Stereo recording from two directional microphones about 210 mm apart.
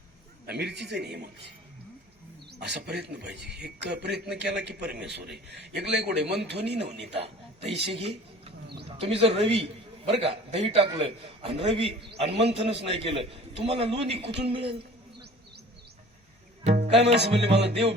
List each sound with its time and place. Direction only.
0.4 s a man's voice: 50° right (ahead or behind)
2.5 s a man's voice: 50° right (ahead or behind)
7.1 s a man's voice: 30° right (ahead or behind)
8.6 s bird: 50° right (ahead or behind)
9.0 s a man's voice: 30° right (ahead or behind)
16.7 s music: 30° right (ahead or behind)